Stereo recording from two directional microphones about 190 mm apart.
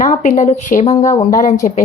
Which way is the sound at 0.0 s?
40° left (ahead or behind).